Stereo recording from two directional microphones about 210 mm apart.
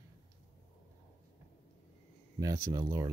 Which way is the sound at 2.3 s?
15° right (ahead or behind).